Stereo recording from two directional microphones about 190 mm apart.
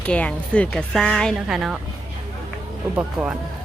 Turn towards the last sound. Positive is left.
turn(degrees=-5)  # may be behind; listen again after turning